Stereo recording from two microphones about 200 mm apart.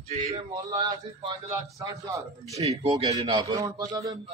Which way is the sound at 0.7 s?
20° right (ahead or behind).